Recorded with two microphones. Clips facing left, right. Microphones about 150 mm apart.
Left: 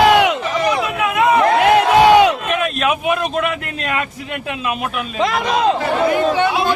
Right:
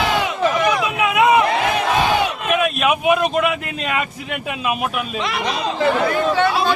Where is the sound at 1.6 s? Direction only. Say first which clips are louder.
Left 7 dB; 75° left (ahead or behind).